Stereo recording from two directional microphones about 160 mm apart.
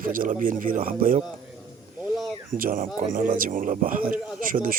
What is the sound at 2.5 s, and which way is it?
A man's voice, 60° right (ahead or behind).